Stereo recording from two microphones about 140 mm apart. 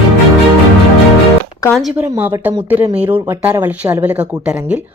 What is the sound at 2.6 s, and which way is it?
Speech, 10° right (ahead or behind).